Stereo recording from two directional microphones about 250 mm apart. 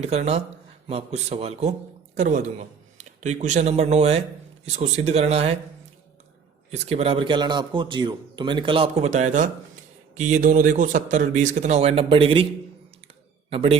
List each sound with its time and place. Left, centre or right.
0.0 s a man's voice: right
6.7 s speech: right
13.5 s speech: right